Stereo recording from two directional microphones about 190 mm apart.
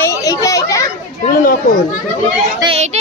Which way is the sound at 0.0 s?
15° left (ahead or behind).